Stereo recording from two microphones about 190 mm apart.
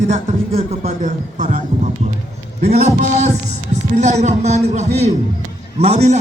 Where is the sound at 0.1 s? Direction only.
35° right (ahead or behind).